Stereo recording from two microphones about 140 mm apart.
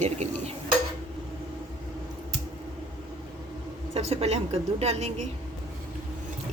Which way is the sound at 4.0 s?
50° right (ahead or behind).